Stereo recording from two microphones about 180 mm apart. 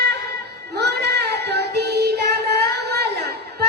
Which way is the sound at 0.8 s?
65° right (ahead or behind).